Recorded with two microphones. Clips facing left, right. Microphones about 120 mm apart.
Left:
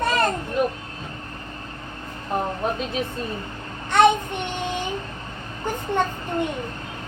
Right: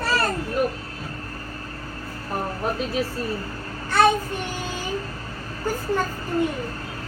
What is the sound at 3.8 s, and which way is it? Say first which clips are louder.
Child singing: left 2 dB; 20° left (ahead or behind).